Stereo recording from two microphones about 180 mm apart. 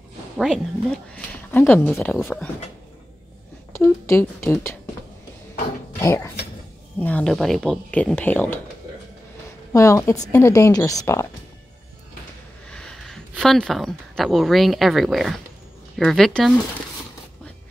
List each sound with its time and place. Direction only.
0.4 s speech: 5° left (ahead or behind)
3.7 s speech: 15° left (ahead or behind)
5.9 s speech: 15° left (ahead or behind)
9.7 s speech: 15° left (ahead or behind)
12.6 s a sound: 5° left (ahead or behind)
13.3 s speech: centre (ahead or behind)